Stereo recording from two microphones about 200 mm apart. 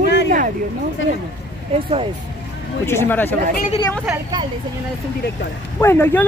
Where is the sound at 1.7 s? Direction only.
25° right (ahead or behind).